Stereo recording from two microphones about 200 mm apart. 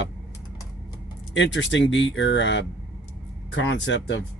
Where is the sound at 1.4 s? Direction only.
65° left (ahead or behind).